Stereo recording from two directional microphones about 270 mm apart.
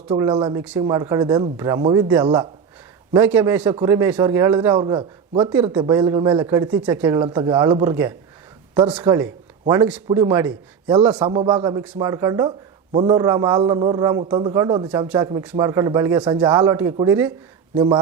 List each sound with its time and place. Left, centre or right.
0.1 s a man's voice: centre